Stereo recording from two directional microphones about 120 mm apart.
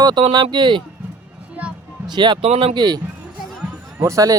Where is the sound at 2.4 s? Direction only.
55° right (ahead or behind).